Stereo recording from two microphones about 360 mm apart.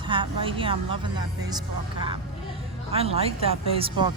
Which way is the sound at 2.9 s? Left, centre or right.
Centre.